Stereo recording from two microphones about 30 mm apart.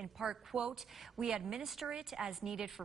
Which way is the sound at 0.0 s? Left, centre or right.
Centre.